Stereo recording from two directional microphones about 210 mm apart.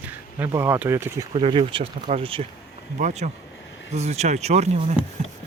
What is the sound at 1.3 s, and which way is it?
Speech, 25° right (ahead or behind).